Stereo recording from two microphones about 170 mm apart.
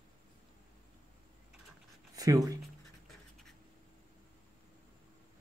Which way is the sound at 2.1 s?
20° right (ahead or behind).